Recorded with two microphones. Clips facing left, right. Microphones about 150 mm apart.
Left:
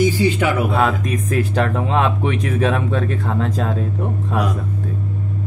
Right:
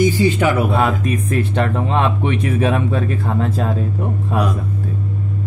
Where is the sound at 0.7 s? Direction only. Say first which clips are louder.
Right 1 dB; 5° right (ahead or behind).